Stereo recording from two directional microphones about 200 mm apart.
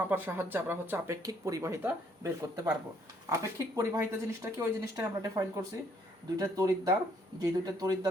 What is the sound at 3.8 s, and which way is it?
Speech, 15° right (ahead or behind).